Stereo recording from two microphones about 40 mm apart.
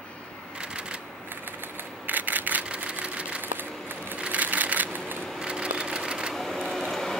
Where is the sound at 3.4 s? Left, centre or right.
Right.